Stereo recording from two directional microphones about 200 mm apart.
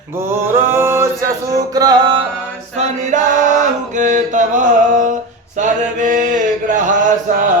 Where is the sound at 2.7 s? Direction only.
35° right (ahead or behind).